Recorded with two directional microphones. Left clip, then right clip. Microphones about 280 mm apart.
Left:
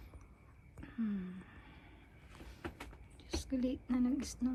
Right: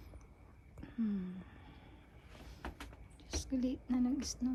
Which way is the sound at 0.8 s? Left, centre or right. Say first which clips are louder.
Right 1 dB; centre.